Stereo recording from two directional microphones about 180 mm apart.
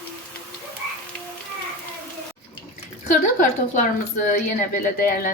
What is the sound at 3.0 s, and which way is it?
A woman's voice, 45° left (ahead or behind).